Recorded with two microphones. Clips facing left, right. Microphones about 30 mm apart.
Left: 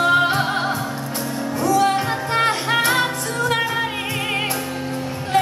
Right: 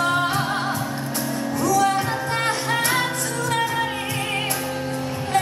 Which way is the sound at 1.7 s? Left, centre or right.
Left.